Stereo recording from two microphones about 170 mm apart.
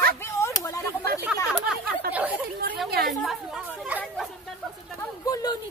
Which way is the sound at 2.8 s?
65° right (ahead or behind).